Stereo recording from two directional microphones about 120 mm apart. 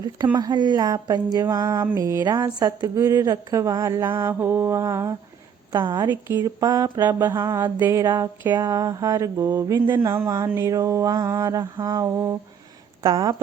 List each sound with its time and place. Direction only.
0.3 s speech: 35° right (ahead or behind)